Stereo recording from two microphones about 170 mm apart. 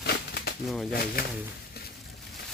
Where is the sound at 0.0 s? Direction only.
75° left (ahead or behind).